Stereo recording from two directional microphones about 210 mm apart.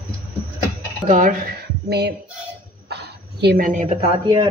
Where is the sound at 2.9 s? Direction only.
50° right (ahead or behind).